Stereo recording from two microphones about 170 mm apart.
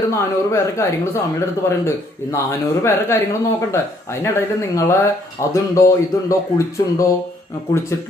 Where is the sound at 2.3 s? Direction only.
15° left (ahead or behind).